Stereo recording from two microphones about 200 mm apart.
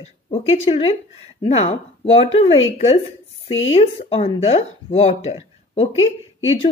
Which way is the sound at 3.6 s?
30° left (ahead or behind).